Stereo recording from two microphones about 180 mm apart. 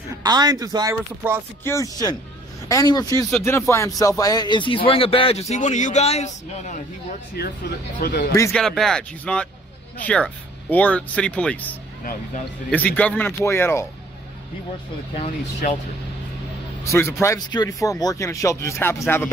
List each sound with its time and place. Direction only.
0.2 s speech: 20° right (ahead or behind)
1.6 s a man's voice: 15° left (ahead or behind); by 6.3 s 35° left (ahead or behind)
7.4 s a man's voice: 60° left (ahead or behind)
8.5 s a man's voice: centre (ahead or behind)
12.7 s a man's voice: 10° left (ahead or behind)
15.1 s speech: 35° left (ahead or behind)
16.8 s a man's voice: 15° left (ahead or behind)